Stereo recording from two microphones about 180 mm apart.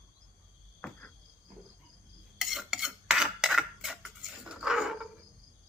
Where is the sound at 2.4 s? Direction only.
Centre (ahead or behind).